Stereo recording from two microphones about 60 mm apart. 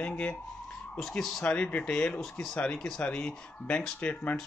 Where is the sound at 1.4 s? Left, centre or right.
Left.